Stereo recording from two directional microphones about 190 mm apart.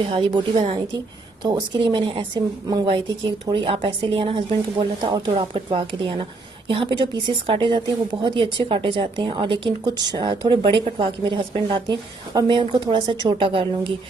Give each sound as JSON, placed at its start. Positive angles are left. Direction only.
{"t": 0.1, "sound": "a woman's voice", "side_deg": -25}